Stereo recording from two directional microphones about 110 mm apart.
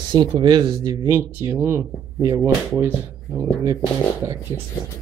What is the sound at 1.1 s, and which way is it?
Speech, 20° right (ahead or behind).